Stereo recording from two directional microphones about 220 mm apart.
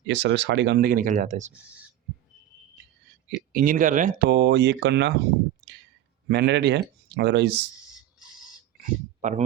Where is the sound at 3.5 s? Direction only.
40° right (ahead or behind).